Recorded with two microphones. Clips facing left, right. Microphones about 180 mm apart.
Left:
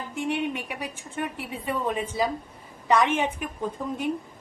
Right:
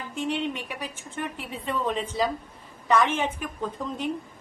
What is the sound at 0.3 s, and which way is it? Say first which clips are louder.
Speech: left 1 dB; 60° left (ahead or behind).